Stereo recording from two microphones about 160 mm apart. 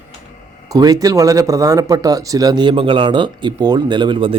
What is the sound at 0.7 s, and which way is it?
Speech, 20° right (ahead or behind).